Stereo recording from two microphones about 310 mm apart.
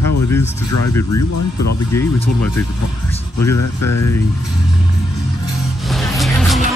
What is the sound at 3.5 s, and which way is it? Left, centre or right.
Speech, left.